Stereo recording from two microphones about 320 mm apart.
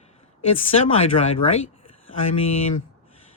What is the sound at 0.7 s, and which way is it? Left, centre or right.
Speech, centre.